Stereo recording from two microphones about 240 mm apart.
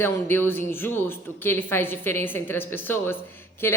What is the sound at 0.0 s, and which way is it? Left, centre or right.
A woman's voice, centre.